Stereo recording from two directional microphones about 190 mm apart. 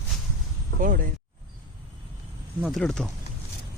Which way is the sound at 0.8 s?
45° right (ahead or behind).